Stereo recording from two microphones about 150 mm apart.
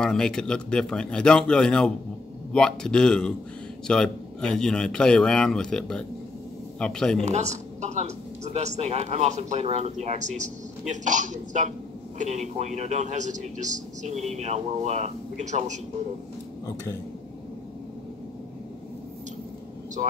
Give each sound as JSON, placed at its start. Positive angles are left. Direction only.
{"t": 0.0, "sound": "speech", "side_deg": 5}
{"t": 7.2, "sound": "a man's voice", "side_deg": -50}